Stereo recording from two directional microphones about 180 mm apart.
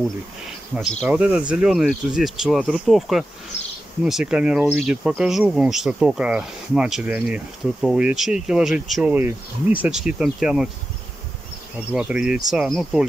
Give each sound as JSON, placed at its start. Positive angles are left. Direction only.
{"t": 0.5, "sound": "speech", "side_deg": 0}
{"t": 3.5, "sound": "bee", "side_deg": 35}
{"t": 4.0, "sound": "speech", "side_deg": -5}
{"t": 11.9, "sound": "speech", "side_deg": -5}